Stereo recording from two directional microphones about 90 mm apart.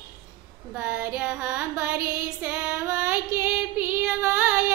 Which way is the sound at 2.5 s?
10° right (ahead or behind).